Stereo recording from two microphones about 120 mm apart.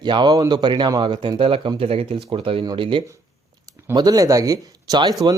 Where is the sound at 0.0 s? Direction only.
40° right (ahead or behind).